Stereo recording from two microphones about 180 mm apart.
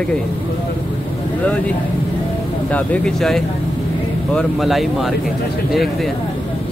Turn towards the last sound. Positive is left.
turn(degrees=0)  # may be behind; listen again after turning